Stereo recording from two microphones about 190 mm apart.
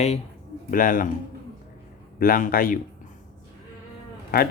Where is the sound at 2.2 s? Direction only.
50° left (ahead or behind).